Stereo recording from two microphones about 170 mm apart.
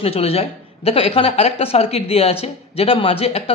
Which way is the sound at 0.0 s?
35° left (ahead or behind).